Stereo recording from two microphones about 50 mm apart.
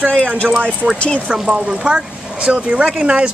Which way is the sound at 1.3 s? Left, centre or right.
Right.